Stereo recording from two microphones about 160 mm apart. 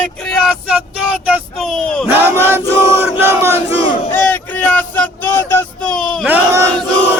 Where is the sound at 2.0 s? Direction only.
15° right (ahead or behind).